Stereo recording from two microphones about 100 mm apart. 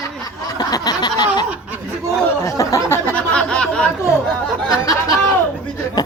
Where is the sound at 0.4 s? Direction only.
40° left (ahead or behind).